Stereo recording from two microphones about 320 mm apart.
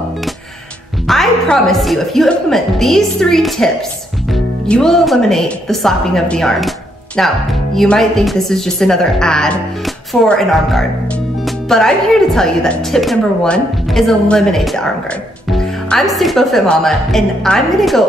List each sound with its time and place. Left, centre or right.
1.0 s speech: centre